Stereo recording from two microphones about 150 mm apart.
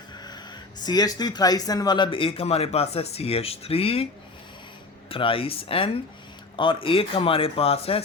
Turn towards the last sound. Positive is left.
turn(degrees=40)  # may be behind; listen again after turning